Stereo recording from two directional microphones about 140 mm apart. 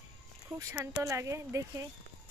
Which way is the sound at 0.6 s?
20° right (ahead or behind).